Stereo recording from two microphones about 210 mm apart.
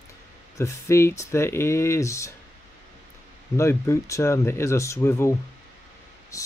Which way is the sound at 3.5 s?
15° left (ahead or behind).